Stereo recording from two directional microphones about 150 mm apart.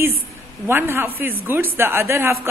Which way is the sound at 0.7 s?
15° right (ahead or behind).